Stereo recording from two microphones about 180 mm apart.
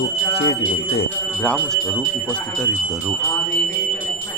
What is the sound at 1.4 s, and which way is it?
Speech, 5° left (ahead or behind).